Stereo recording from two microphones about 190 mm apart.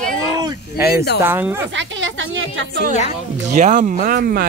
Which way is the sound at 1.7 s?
80° right.